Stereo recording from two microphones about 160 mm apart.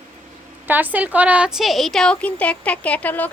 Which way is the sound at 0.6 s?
10° right (ahead or behind).